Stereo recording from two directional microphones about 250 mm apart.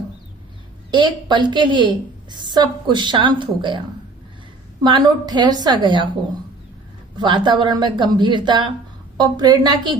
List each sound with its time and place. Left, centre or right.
0.9 s a woman's voice: centre
4.8 s a woman's voice: centre
7.2 s a woman's voice: centre